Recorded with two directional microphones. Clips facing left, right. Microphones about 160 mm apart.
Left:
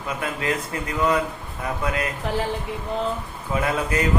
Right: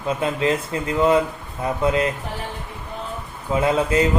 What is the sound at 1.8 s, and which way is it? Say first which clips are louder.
Speech: right 7 dB; 25° right (ahead or behind).